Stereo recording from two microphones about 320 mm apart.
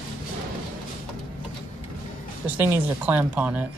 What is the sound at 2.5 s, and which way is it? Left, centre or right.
A man's voice, centre.